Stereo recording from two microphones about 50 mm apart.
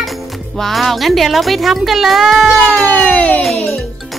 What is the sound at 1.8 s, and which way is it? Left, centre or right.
Music, centre.